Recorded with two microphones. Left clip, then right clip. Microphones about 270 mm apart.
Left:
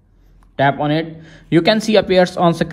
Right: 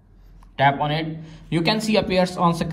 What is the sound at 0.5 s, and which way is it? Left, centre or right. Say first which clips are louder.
Speech: left 3 dB; left.